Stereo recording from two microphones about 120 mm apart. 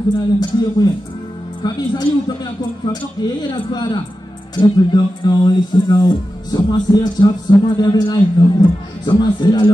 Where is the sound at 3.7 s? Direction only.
35° left (ahead or behind).